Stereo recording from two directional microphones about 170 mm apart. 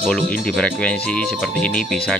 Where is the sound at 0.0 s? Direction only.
5° left (ahead or behind).